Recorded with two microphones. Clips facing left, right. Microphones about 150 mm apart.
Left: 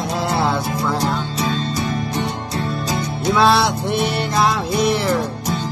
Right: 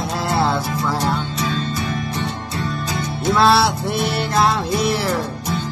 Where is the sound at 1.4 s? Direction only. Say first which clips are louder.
Left 2 dB; 35° left (ahead or behind).